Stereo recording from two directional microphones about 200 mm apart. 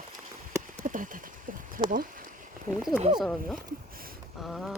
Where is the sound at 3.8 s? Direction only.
45° right (ahead or behind).